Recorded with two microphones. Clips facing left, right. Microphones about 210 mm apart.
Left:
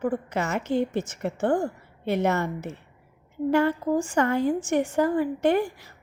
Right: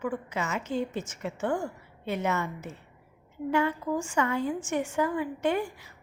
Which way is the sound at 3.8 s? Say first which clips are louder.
Left 5 dB; 35° left (ahead or behind).